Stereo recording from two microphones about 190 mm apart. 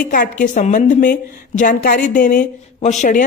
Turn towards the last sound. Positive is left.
turn(degrees=40)  # may be behind; listen again after turning